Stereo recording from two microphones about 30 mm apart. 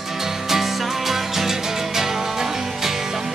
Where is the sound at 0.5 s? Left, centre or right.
Centre.